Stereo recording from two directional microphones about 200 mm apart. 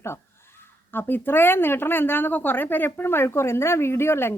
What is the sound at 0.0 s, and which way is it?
Speech, 10° left (ahead or behind).